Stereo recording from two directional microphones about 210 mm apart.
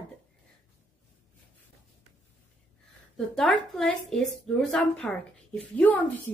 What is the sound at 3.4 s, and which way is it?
A woman's voice, centre (ahead or behind).